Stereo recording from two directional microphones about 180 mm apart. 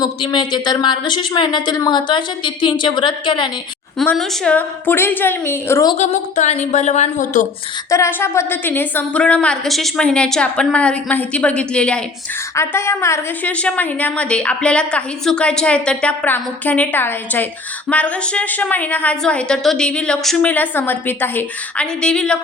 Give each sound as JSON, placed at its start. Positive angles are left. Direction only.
{"t": 0.0, "sound": "a woman's voice", "side_deg": 25}
{"t": 3.9, "sound": "a woman's voice", "side_deg": 0}
{"t": 6.0, "sound": "a woman's voice", "side_deg": 40}
{"t": 7.9, "sound": "a woman's voice", "side_deg": 15}